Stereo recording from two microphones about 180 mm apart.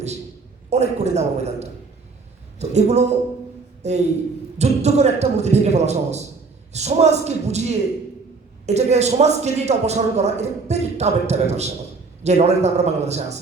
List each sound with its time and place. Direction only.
0.7 s a man's voice: 40° right (ahead or behind)